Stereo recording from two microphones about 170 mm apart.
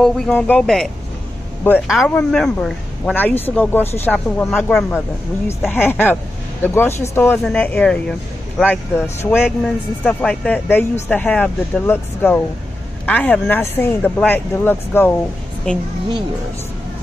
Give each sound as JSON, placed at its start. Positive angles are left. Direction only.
{"t": 0.0, "sound": "speech", "side_deg": 5}
{"t": 9.0, "sound": "speech", "side_deg": 15}